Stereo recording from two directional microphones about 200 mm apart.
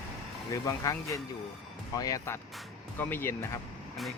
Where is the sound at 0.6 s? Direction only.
15° left (ahead or behind).